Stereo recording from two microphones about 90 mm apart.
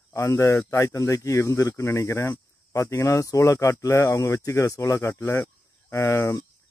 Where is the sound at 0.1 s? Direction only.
35° left (ahead or behind).